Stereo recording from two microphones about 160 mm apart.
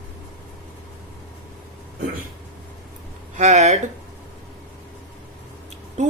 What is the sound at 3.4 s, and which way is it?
Speech, 45° right (ahead or behind).